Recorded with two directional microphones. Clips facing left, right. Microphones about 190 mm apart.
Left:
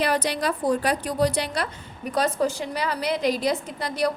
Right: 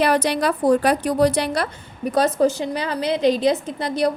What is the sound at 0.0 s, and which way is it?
Speech, 65° right (ahead or behind).